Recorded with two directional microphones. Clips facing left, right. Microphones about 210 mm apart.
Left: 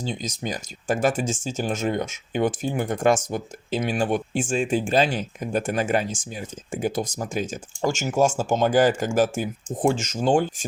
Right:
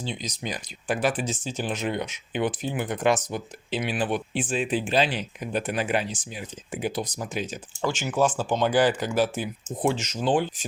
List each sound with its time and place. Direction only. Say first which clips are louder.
0.0 s speech: left 3 dB; 45° left (ahead or behind)